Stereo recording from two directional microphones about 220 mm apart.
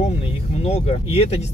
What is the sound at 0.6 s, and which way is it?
Speech, 30° left (ahead or behind).